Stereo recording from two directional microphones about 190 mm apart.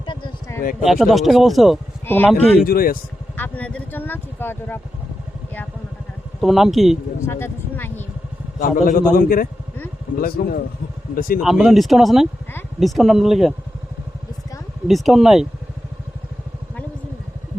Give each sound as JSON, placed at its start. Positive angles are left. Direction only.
{"t": 0.0, "sound": "a sound", "side_deg": 25}
{"t": 0.9, "sound": "speech", "side_deg": 0}
{"t": 2.0, "sound": "speech", "side_deg": 10}
{"t": 2.6, "sound": "a man's voice", "side_deg": 50}
{"t": 3.3, "sound": "speech", "side_deg": 10}
{"t": 6.4, "sound": "speech", "side_deg": 0}
{"t": 7.2, "sound": "speech", "side_deg": 15}
{"t": 8.5, "sound": "a man's voice", "side_deg": 45}
{"t": 11.3, "sound": "speech", "side_deg": 0}
{"t": 14.8, "sound": "speech", "side_deg": 0}